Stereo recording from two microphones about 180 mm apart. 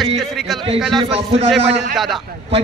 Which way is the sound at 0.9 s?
35° right (ahead or behind).